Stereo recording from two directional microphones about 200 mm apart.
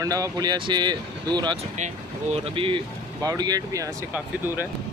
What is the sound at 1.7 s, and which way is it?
Speech, 35° right (ahead or behind).